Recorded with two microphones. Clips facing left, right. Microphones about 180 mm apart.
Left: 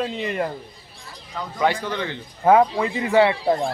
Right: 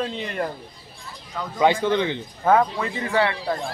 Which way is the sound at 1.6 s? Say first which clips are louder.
Right 4 dB; 20° right (ahead or behind).